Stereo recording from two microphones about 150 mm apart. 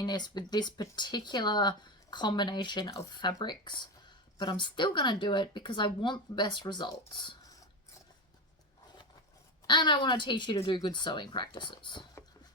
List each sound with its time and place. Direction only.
0.0 s a woman's voice: 30° left (ahead or behind)
9.6 s a woman's voice: 30° left (ahead or behind)